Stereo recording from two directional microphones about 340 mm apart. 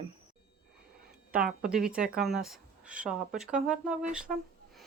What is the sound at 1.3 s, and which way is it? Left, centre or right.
Speech, centre.